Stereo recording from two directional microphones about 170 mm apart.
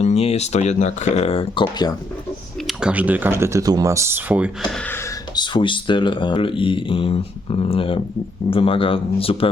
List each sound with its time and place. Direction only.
0.0 s speech: 40° left (ahead or behind)
2.6 s speech: 5° right (ahead or behind)
5.4 s speech: 30° left (ahead or behind)